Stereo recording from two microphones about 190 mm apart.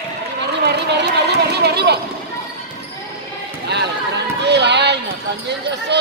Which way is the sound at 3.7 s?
65° right (ahead or behind).